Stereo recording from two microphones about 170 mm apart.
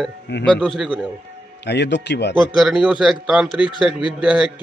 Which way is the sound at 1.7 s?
85° left.